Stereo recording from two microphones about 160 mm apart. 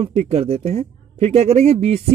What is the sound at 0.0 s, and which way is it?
Speech, 40° right (ahead or behind).